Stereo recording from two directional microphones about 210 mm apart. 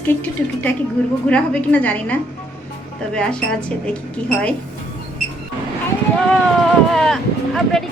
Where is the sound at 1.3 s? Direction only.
5° left (ahead or behind).